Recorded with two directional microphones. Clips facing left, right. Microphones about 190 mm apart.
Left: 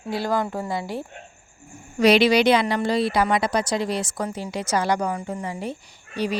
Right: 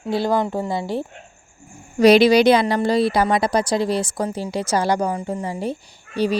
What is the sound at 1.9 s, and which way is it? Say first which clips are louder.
A woman's voice: right 4 dB; 40° right (ahead or behind).